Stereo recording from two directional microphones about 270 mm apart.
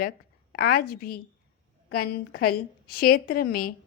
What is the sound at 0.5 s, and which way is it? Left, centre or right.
A woman's voice, left.